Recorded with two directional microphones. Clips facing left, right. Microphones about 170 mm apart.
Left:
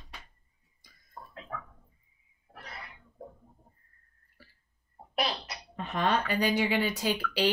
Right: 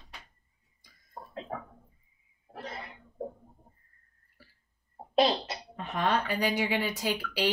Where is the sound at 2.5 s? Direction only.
25° right (ahead or behind).